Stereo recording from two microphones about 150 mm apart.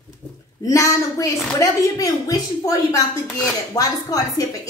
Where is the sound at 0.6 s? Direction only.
20° left (ahead or behind).